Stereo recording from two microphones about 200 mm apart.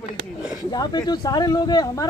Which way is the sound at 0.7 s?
20° left (ahead or behind).